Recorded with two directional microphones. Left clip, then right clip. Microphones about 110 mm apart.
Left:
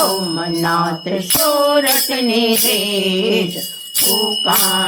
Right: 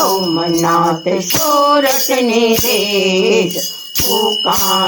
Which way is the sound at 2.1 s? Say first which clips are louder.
Right 4 dB; 35° right (ahead or behind).